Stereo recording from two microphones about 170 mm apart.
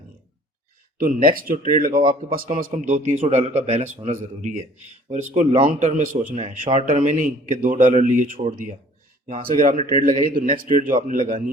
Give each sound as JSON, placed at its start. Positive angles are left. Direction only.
{"t": 0.9, "sound": "a man's voice", "side_deg": -55}